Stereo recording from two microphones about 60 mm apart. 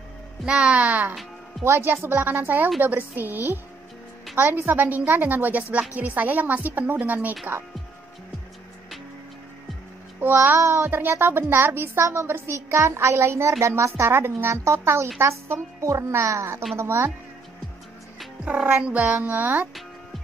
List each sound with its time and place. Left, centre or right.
0.5 s a woman's voice: centre
1.6 s a child's voice: right
1.9 s a woman's voice: right
10.2 s a child's voice: right
10.9 s speech: right
12.0 s a child's voice: right
15.8 s a child's voice: right
18.4 s a woman's voice: right